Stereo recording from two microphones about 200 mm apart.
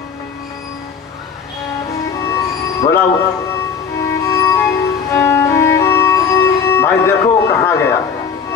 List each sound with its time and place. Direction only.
2.1 s music: 15° left (ahead or behind)
4.2 s music: 15° left (ahead or behind)